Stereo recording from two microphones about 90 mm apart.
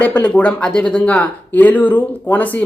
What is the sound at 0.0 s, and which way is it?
Speech, 15° left (ahead or behind).